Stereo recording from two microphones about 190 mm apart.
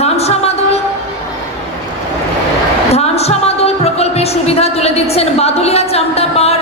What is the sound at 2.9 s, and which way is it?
Music, 35° left (ahead or behind).